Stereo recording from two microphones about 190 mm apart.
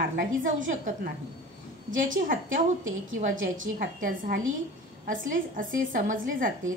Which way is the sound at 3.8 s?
45° right (ahead or behind).